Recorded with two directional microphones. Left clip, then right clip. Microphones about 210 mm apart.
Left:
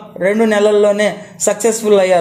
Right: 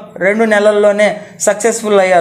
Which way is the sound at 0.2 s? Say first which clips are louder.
Right 2 dB; 25° left (ahead or behind).